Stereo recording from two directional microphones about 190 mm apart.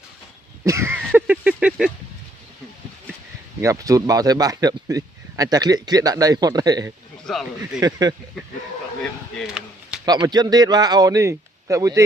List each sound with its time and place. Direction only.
0.6 s a sound: 15° right (ahead or behind)
3.6 s a man's voice: 15° right (ahead or behind)
7.3 s speech: centre (ahead or behind)
7.8 s a man's voice: 20° right (ahead or behind)
9.4 s a sound: 5° right (ahead or behind)
10.1 s a man's voice: 20° right (ahead or behind)